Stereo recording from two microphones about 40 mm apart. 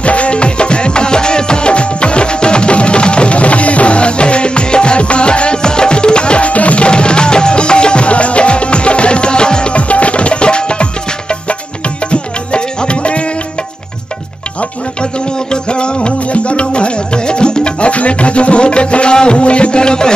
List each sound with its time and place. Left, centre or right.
0.0 s music: left
14.6 s music: left